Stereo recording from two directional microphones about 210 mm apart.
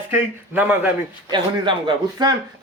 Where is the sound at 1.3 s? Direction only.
20° right (ahead or behind).